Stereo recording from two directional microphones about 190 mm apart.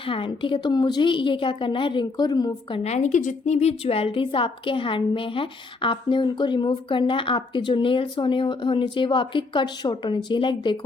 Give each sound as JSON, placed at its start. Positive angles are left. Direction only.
{"t": 0.0, "sound": "a woman's voice", "side_deg": 25}
{"t": 2.8, "sound": "a woman's voice", "side_deg": 35}